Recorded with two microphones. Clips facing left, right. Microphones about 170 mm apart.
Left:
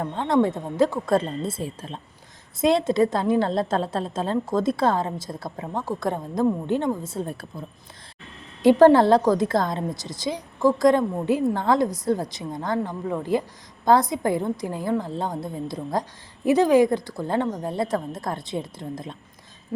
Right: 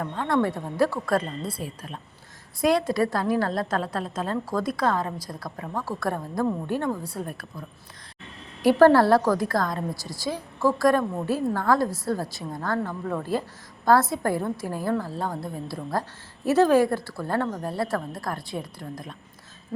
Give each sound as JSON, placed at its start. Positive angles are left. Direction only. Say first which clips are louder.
{"t": 0.0, "sound": "a woman's voice", "louder": "left 3 dB", "side_deg": 20}
{"t": 8.6, "sound": "a woman's voice", "louder": "left 2 dB", "side_deg": 20}